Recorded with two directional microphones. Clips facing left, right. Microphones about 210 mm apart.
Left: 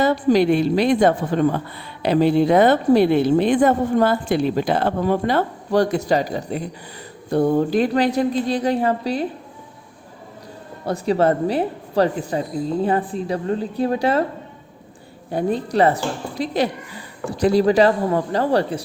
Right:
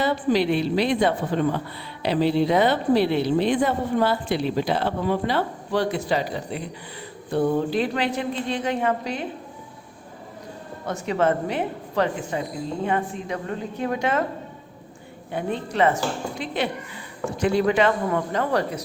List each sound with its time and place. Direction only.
0.0 s a woman's voice: 45° left (ahead or behind)
10.8 s a woman's voice: 35° left (ahead or behind)
15.3 s a woman's voice: 35° left (ahead or behind)